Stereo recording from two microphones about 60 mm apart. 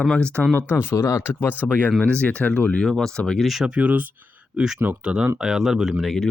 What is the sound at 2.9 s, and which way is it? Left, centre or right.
Speech, centre.